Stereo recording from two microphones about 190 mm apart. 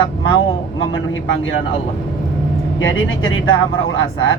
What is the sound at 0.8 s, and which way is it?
Speech, 90° left.